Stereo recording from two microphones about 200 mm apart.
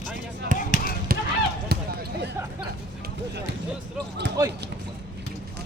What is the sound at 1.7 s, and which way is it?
Basketball bounce, 55° right (ahead or behind).